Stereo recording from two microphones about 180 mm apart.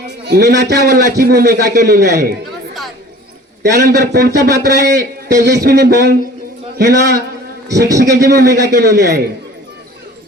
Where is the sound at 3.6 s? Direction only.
65° right (ahead or behind).